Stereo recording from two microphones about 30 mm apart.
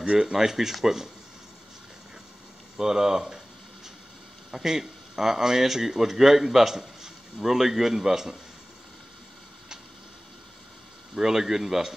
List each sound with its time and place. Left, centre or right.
0.2 s a man's voice: centre
2.8 s speech: centre
4.6 s a man's voice: centre
11.1 s a man's voice: centre